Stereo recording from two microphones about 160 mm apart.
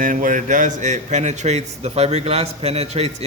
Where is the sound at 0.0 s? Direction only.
55° right (ahead or behind).